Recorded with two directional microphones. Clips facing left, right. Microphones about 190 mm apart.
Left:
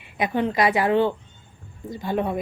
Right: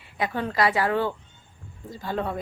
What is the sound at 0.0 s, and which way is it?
A woman's voice, 20° left (ahead or behind).